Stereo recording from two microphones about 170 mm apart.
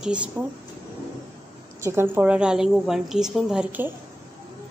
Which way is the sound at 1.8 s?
15° right (ahead or behind).